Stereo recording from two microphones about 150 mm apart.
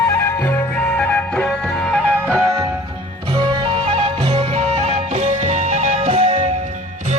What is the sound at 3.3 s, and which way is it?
Music, 30° right (ahead or behind).